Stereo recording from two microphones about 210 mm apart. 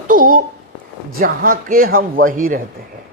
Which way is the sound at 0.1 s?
40° right (ahead or behind).